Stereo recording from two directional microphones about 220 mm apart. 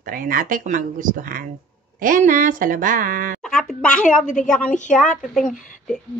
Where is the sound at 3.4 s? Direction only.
Centre (ahead or behind).